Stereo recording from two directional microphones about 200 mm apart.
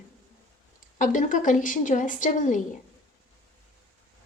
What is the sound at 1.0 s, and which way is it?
A woman's voice, 40° left (ahead or behind).